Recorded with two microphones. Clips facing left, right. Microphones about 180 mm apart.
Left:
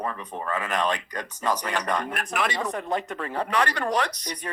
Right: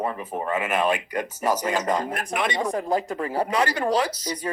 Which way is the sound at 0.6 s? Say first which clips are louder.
Right 3 dB; 5° right (ahead or behind).